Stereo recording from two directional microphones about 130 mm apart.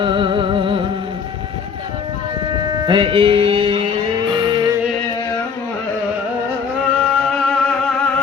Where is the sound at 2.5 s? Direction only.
35° right (ahead or behind).